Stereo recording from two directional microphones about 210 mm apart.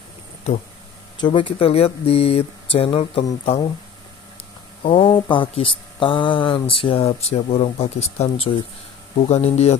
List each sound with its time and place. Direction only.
1.1 s speech: 20° left (ahead or behind)
4.8 s speech: 25° left (ahead or behind)